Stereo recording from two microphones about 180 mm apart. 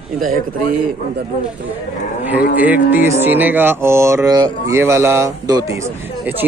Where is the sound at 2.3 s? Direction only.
10° right (ahead or behind).